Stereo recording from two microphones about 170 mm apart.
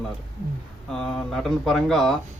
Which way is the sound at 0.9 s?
5° left (ahead or behind).